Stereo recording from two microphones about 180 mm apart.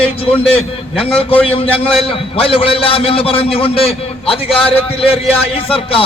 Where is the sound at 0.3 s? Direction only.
30° left (ahead or behind).